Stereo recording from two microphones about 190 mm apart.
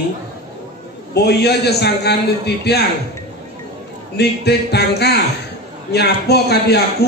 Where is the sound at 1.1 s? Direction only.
60° left (ahead or behind).